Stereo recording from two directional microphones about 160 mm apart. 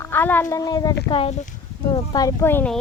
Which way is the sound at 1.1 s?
40° left (ahead or behind).